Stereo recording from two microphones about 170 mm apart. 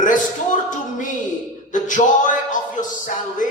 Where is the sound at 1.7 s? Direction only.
50° left (ahead or behind).